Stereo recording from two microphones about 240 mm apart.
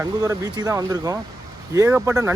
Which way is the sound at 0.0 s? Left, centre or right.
Centre.